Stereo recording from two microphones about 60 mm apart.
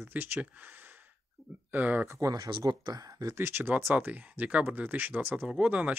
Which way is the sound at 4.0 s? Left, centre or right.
Right.